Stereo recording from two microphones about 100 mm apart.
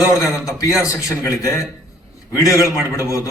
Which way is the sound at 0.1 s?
30° left (ahead or behind).